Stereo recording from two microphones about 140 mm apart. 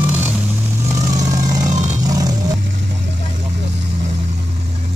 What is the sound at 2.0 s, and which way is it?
Vehicle, 25° right (ahead or behind).